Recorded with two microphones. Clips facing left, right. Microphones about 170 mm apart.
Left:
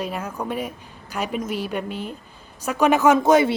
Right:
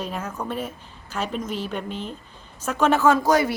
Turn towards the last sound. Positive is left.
turn(degrees=25)  # may be behind; listen again after turning